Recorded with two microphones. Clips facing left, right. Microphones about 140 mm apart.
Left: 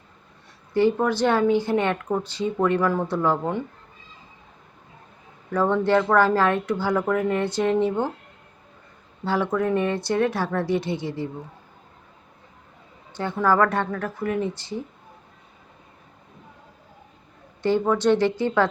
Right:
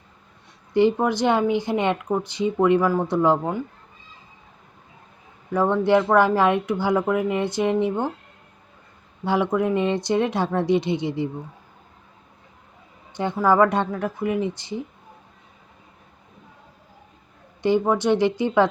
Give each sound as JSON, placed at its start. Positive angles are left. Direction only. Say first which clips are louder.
{"t": 0.7, "sound": "speech", "louder": "right 1 dB", "side_deg": -20}
{"t": 5.5, "sound": "speech", "louder": "right 2 dB", "side_deg": -15}
{"t": 9.2, "sound": "speech", "louder": "right 2 dB", "side_deg": -15}
{"t": 13.1, "sound": "speech", "louder": "right 2 dB", "side_deg": -15}
{"t": 17.6, "sound": "speech", "louder": "right 1 dB", "side_deg": -15}